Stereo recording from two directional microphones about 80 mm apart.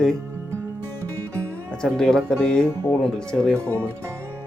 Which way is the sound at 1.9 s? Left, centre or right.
Centre.